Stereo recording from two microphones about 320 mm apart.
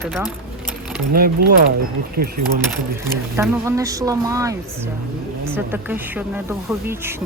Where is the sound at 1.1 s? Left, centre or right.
Right.